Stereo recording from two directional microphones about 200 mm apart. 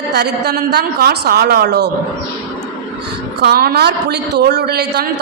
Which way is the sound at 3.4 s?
50° right (ahead or behind).